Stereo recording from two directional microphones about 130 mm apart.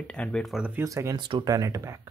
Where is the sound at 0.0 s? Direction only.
10° left (ahead or behind).